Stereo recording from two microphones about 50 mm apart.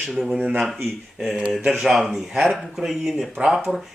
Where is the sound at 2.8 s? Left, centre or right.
Centre.